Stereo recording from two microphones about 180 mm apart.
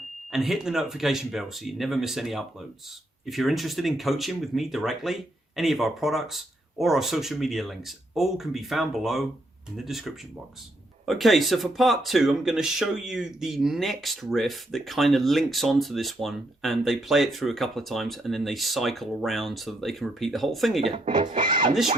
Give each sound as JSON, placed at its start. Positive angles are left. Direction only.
{"t": 0.3, "sound": "speech", "side_deg": 0}
{"t": 21.4, "sound": "speech", "side_deg": -25}